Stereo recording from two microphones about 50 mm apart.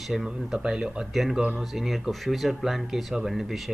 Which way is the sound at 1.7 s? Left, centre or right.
Centre.